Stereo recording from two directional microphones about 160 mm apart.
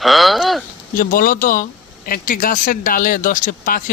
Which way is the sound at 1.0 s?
60° left (ahead or behind).